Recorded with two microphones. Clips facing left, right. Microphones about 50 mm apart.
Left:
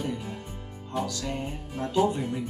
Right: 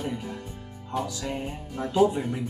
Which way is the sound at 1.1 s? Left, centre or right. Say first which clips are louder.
Even; centre.